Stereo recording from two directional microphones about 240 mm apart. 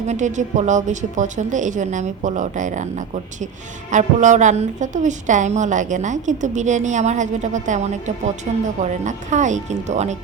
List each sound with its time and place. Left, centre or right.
0.1 s a woman's voice: right
3.9 s a woman's voice: right